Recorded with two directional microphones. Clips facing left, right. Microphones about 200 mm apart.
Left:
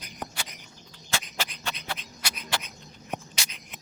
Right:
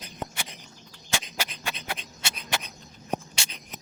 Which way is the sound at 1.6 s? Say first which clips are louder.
Right 1 dB; 10° right (ahead or behind).